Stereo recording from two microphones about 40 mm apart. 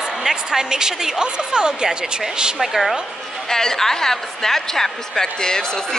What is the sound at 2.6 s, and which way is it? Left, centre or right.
Speech, centre.